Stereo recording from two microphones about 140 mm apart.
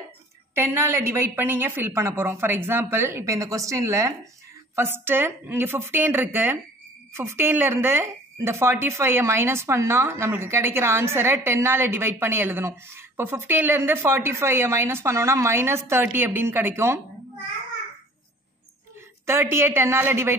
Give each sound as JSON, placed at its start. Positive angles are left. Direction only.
{"t": 0.6, "sound": "speech", "side_deg": -15}
{"t": 19.2, "sound": "speech", "side_deg": -15}